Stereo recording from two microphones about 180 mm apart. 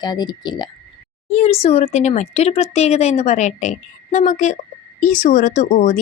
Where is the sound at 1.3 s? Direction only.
35° left (ahead or behind).